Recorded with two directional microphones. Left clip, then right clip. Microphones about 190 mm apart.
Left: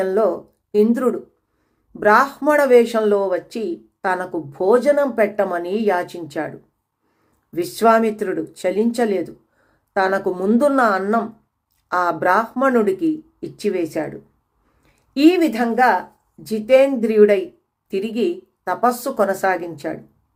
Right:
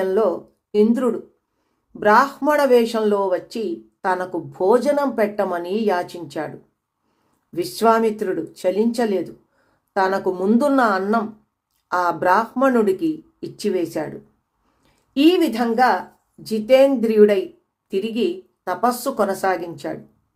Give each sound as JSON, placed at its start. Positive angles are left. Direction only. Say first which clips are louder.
{"t": 0.0, "sound": "speech", "louder": "left 1 dB", "side_deg": 15}
{"t": 7.5, "sound": "speech", "louder": "left 2 dB", "side_deg": 15}
{"t": 15.1, "sound": "speech", "louder": "left 1 dB", "side_deg": 15}